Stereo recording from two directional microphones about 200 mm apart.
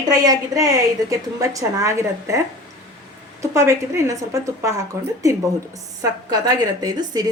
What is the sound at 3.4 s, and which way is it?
A woman's voice, 15° right (ahead or behind).